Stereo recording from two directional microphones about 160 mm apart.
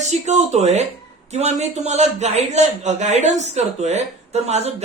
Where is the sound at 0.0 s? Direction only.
45° right (ahead or behind).